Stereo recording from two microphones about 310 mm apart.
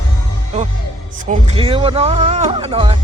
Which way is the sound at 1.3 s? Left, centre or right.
Centre.